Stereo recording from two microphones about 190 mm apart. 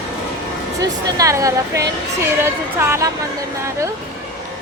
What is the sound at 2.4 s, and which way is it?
Speech, 15° right (ahead or behind).